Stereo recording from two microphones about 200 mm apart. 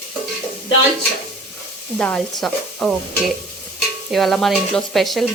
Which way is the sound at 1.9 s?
5° left (ahead or behind).